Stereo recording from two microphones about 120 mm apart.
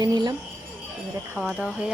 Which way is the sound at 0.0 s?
40° right (ahead or behind).